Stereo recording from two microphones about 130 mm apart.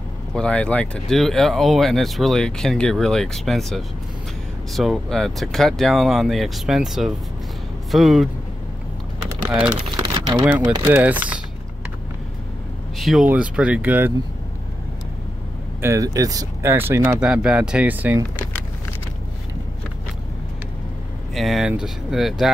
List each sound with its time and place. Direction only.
0.3 s speech: 5° left (ahead or behind)
9.4 s speech: 10° right (ahead or behind)
9.9 s typing: 35° right (ahead or behind)
10.6 s speech: 35° right (ahead or behind)
10.9 s speech: 10° right (ahead or behind)
12.9 s vehicle: centre (ahead or behind)
13.3 s speech: 10° right (ahead or behind)
15.8 s speech: 25° right (ahead or behind)
16.7 s speech: 15° right (ahead or behind)
17.2 s speech: 5° right (ahead or behind)
21.4 s speech: centre (ahead or behind)